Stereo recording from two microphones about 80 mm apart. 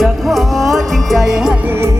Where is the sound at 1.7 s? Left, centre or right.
Right.